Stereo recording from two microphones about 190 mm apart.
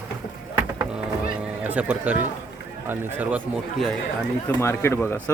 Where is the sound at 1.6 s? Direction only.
10° right (ahead or behind).